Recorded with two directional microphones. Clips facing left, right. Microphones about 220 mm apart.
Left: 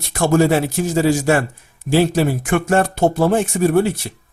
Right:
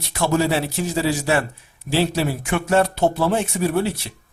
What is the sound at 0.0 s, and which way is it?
Speech, 50° left (ahead or behind).